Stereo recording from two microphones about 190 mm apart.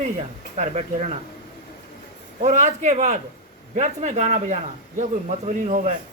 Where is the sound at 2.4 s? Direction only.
35° right (ahead or behind).